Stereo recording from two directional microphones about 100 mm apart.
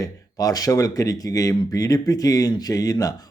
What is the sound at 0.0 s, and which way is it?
Speech, 35° left (ahead or behind).